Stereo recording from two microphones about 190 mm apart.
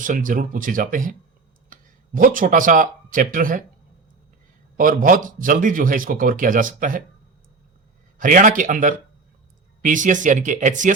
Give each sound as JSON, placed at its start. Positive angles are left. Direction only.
{"t": 0.0, "sound": "speech", "side_deg": -45}
{"t": 4.8, "sound": "speech", "side_deg": -45}
{"t": 8.2, "sound": "speech", "side_deg": -45}